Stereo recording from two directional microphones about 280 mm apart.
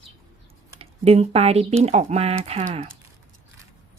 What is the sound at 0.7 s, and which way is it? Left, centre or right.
Speech, right.